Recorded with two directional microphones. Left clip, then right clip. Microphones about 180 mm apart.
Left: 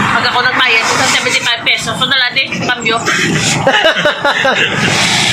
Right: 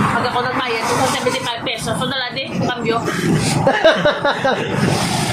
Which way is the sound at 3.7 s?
5° left (ahead or behind).